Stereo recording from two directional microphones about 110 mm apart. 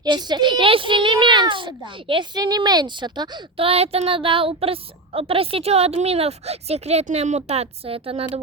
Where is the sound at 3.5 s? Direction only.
65° right (ahead or behind).